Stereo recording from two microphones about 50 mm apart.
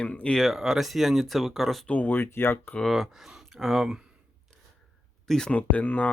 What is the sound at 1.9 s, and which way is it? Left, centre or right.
Speech, left.